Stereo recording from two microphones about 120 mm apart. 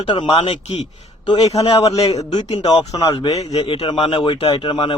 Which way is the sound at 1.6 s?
55° left (ahead or behind).